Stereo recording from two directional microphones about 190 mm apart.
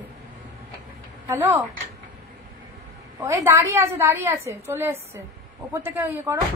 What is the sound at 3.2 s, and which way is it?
A woman's voice, 15° right (ahead or behind).